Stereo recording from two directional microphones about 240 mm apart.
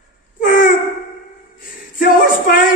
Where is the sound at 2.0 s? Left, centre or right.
Left.